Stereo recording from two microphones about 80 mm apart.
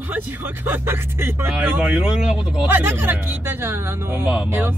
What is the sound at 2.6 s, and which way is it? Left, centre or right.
Speech, right.